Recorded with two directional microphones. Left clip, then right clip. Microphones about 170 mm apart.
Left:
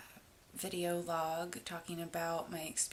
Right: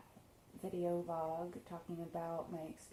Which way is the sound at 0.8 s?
35° left (ahead or behind).